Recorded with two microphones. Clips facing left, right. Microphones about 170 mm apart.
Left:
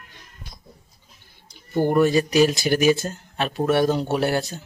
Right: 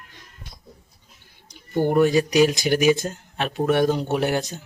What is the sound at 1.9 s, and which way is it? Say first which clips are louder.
Speech: even; 15° right (ahead or behind).